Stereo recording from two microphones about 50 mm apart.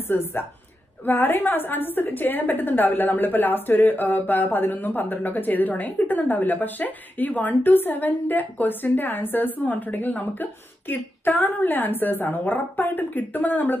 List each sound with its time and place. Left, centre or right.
0.1 s a woman's voice: left